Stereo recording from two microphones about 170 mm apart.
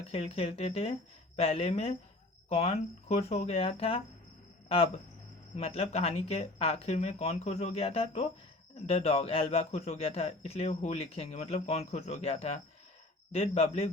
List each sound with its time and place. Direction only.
0.0 s a man's voice: 35° left (ahead or behind)
5.5 s a man's voice: 35° left (ahead or behind)